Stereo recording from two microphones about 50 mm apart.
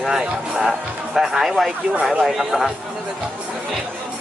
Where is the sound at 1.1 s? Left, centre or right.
Centre.